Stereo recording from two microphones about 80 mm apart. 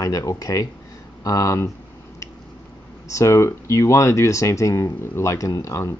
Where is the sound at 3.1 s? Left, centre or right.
Left.